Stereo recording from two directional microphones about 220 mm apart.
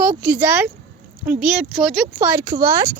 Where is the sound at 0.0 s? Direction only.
10° right (ahead or behind).